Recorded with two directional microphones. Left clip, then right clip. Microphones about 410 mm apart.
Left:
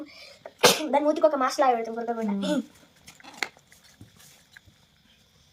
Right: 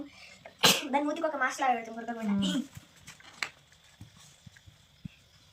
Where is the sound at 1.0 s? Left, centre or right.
Centre.